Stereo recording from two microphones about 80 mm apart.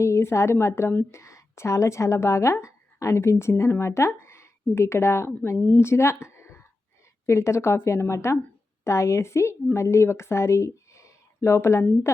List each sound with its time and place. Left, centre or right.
0.0 s a woman's voice: left